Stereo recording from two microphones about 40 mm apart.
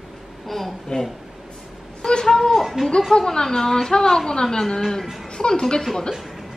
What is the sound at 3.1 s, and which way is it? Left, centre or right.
Speech, centre.